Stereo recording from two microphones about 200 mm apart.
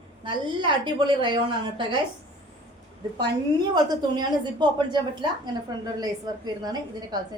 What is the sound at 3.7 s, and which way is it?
A woman's voice, 20° right (ahead or behind).